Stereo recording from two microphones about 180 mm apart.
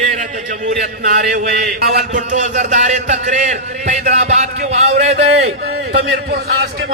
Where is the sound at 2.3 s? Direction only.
40° right (ahead or behind).